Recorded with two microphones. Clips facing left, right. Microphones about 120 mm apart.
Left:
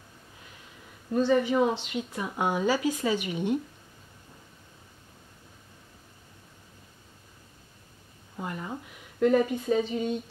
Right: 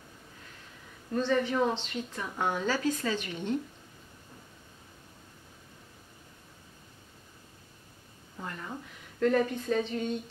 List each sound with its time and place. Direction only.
1.1 s speech: 10° left (ahead or behind)
8.4 s a sound: 15° left (ahead or behind)
9.2 s speech: 10° left (ahead or behind)